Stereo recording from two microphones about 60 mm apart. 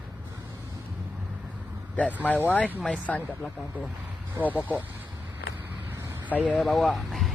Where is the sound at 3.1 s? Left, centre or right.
Centre.